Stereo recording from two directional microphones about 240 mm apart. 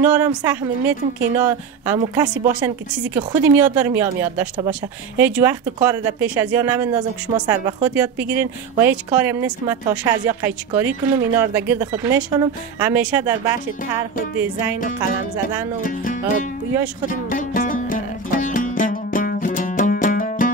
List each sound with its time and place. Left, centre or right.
0.0 s speech: centre
15.8 s music: left